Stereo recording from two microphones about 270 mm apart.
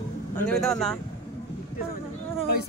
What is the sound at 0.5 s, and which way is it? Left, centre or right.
Speech, centre.